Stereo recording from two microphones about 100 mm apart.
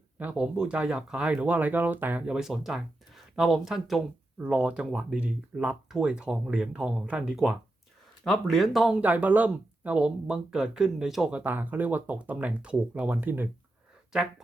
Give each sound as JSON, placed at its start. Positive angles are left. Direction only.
{"t": 0.2, "sound": "speech", "side_deg": -10}
{"t": 4.4, "sound": "speech", "side_deg": -15}
{"t": 8.2, "sound": "speech", "side_deg": 5}
{"t": 9.0, "sound": "speech", "side_deg": -15}
{"t": 11.3, "sound": "speech", "side_deg": -15}
{"t": 14.1, "sound": "speech", "side_deg": -5}